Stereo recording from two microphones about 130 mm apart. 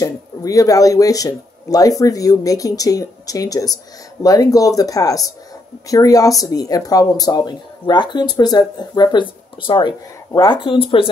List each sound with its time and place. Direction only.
0.0 s speech: 25° left (ahead or behind); by 11.1 s 45° left (ahead or behind)